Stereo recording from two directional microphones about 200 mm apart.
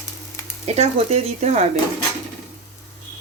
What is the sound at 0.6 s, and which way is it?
Speech, 30° right (ahead or behind).